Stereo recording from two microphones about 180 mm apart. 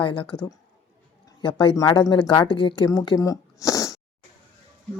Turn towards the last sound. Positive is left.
turn(degrees=20)  # may be behind; listen again after turning